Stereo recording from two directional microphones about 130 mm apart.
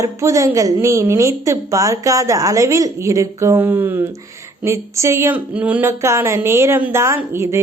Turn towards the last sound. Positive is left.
turn(degrees=-20)  # may be behind; listen again after turning